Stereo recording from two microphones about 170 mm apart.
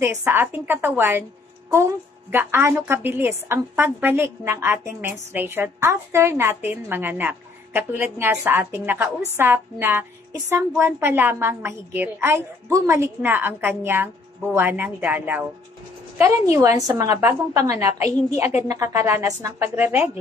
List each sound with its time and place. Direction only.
0.0 s a woman's voice: 15° right (ahead or behind)
2.3 s a woman's voice: 15° right (ahead or behind)
16.8 s a woman's voice: 15° right (ahead or behind)